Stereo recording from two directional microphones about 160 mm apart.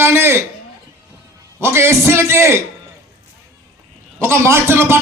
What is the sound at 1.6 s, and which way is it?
Speech, 15° right (ahead or behind).